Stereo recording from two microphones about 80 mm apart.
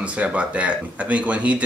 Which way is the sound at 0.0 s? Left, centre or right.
Centre.